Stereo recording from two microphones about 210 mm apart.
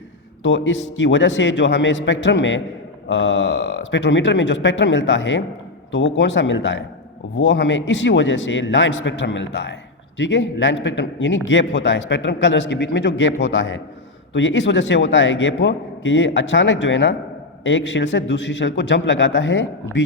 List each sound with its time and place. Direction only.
0.4 s a man's voice: 60° left (ahead or behind)